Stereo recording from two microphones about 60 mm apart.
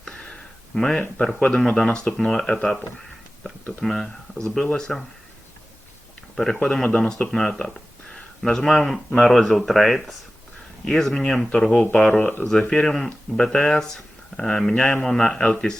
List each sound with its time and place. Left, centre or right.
0.0 s a sound: centre
0.8 s speech: centre
3.8 s speech: centre
6.3 s speech: centre
12.2 s speech: left
12.5 s speech: centre